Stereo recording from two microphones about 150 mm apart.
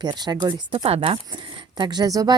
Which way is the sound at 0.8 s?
40° right (ahead or behind).